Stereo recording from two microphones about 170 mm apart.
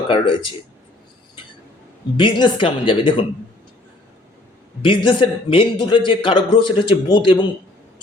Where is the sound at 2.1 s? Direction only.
30° left (ahead or behind).